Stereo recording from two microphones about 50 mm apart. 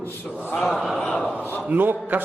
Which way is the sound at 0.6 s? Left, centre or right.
Centre.